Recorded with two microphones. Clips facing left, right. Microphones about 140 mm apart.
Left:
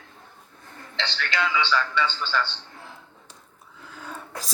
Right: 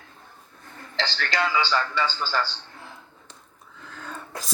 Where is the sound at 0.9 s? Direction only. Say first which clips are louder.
Right 2 dB; 40° right (ahead or behind).